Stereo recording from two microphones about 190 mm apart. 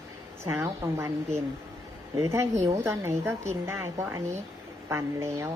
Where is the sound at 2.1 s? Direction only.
15° right (ahead or behind).